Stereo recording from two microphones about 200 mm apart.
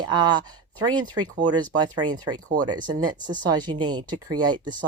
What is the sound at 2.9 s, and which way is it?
Speech, 20° right (ahead or behind).